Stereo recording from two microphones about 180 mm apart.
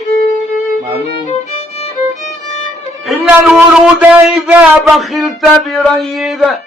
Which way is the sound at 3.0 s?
5° right (ahead or behind).